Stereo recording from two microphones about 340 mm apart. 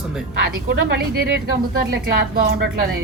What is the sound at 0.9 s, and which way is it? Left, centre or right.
A woman's voice, right.